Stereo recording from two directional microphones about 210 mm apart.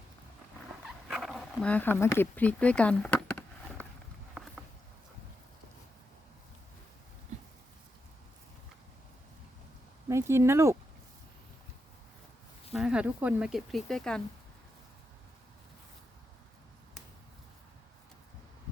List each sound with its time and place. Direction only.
1.0 s speech: centre (ahead or behind)
10.1 s speech: 15° right (ahead or behind)
12.7 s speech: 5° right (ahead or behind)